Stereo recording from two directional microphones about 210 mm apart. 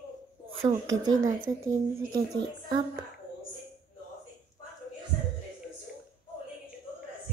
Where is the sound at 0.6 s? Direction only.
20° right (ahead or behind).